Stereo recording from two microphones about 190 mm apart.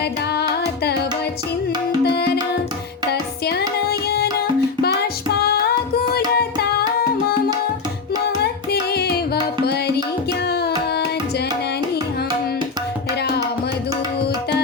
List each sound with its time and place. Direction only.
2.0 s music: 60° left (ahead or behind)
3.8 s tabla: 55° left (ahead or behind)
4.8 s music: 55° left (ahead or behind)
8.7 s music: 55° left (ahead or behind)
10.4 s tabla: 60° left (ahead or behind)